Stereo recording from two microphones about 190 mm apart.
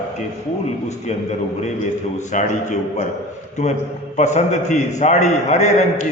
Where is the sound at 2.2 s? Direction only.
40° left (ahead or behind).